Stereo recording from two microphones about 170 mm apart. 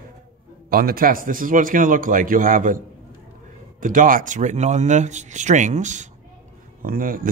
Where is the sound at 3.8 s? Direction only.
50° right (ahead or behind).